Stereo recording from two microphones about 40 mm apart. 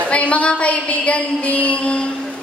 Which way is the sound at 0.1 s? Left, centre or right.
Left.